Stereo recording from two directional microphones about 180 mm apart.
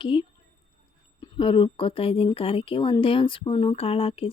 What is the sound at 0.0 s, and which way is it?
Speech, 30° left (ahead or behind).